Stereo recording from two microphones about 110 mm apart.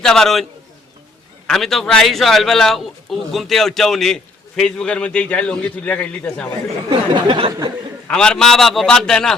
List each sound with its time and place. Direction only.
0.0 s a man's voice: 5° left (ahead or behind)
1.5 s a man's voice: 5° left (ahead or behind)
7.1 s a sound: 50° right (ahead or behind)
8.0 s a man's voice: 10° left (ahead or behind)